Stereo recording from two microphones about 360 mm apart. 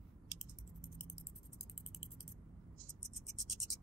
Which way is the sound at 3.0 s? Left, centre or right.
Centre.